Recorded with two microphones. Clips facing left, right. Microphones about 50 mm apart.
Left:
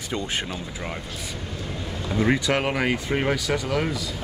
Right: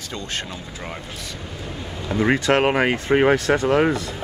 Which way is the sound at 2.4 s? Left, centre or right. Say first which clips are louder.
Right 5 dB; right.